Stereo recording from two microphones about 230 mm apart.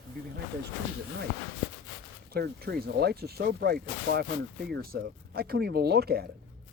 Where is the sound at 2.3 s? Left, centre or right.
Right.